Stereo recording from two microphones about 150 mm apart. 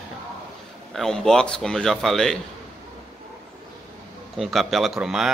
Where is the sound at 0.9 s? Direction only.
5° left (ahead or behind).